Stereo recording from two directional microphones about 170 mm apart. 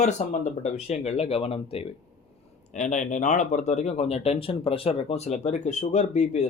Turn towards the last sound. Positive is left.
turn(degrees=40)  # may be behind; listen again after turning